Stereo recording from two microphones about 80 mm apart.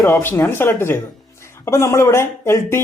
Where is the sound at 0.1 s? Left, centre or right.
Left.